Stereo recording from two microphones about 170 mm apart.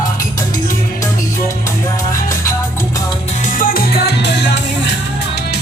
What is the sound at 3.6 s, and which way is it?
Music, 55° left (ahead or behind).